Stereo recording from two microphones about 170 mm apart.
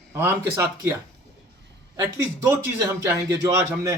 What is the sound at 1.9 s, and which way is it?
Speech, 20° right (ahead or behind).